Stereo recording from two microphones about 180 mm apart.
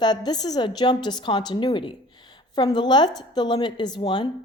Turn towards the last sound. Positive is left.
turn(degrees=25)  # may be behind; listen again after turning